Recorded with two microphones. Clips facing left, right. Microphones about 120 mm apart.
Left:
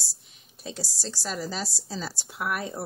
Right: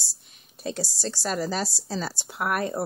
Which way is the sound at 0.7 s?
Centre (ahead or behind).